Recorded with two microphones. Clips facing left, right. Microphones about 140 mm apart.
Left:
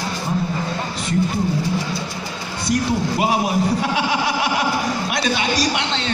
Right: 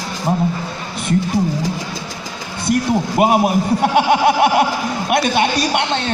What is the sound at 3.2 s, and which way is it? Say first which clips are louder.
A man's voice: right 6 dB; 55° right (ahead or behind).